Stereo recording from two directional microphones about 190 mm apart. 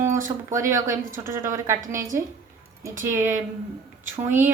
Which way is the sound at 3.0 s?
15° right (ahead or behind).